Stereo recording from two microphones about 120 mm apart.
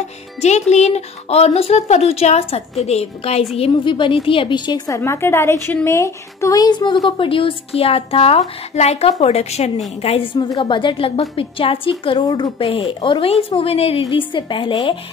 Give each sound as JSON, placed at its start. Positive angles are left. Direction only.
{"t": 0.4, "sound": "speech", "side_deg": 65}
{"t": 3.5, "sound": "a woman's voice", "side_deg": 50}
{"t": 7.1, "sound": "a woman's voice", "side_deg": 45}
{"t": 10.0, "sound": "a woman's voice", "side_deg": 50}
{"t": 12.3, "sound": "a woman's voice", "side_deg": 30}
{"t": 13.6, "sound": "a woman's voice", "side_deg": 55}
{"t": 14.1, "sound": "a woman's voice", "side_deg": 40}